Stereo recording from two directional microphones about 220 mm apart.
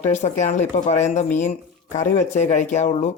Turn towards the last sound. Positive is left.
turn(degrees=30)  # may be behind; listen again after turning